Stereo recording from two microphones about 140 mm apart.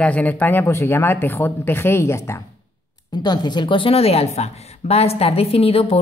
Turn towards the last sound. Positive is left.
turn(degrees=45)  # may be behind; listen again after turning